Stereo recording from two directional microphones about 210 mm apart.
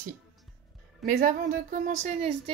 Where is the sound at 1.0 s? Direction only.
40° right (ahead or behind).